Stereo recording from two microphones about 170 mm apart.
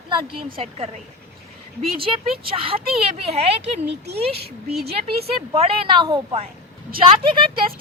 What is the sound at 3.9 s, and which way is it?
Speech, 75° right (ahead or behind).